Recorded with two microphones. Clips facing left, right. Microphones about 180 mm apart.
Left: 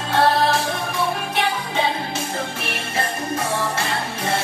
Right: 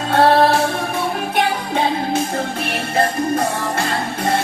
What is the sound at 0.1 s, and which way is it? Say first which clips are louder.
Music: right 5 dB; 60° right (ahead or behind).